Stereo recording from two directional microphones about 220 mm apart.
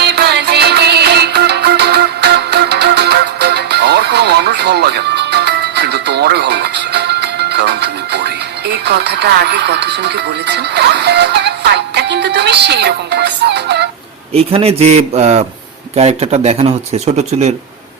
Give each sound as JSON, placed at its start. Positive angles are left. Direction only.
{"t": 0.0, "sound": "music", "side_deg": -50}
{"t": 14.3, "sound": "a man's voice", "side_deg": -25}